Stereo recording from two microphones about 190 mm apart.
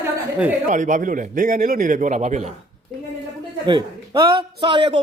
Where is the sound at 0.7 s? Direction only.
40° right (ahead or behind).